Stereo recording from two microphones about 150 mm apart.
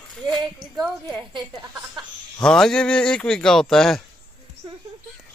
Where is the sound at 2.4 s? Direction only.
5° left (ahead or behind).